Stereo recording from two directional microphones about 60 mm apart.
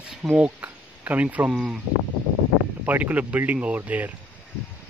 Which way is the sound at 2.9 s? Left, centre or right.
Right.